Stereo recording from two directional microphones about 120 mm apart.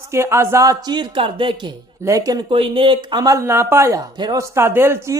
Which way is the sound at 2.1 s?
30° right (ahead or behind).